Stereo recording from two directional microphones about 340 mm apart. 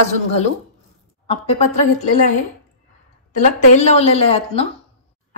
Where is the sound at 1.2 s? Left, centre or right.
Centre.